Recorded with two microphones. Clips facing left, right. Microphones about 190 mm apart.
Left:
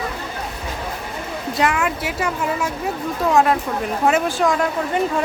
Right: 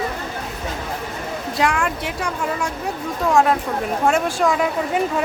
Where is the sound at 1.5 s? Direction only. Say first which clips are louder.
Left 1 dB; centre (ahead or behind).